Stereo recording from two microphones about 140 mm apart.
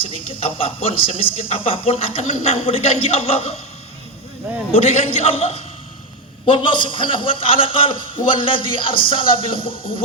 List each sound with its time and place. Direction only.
0.0 s speech: 40° left (ahead or behind)
4.7 s a man's voice: 45° left (ahead or behind)